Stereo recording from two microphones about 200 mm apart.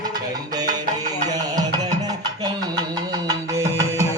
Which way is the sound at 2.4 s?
20° right (ahead or behind).